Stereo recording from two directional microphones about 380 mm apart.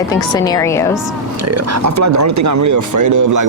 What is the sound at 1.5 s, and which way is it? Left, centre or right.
Speech, right.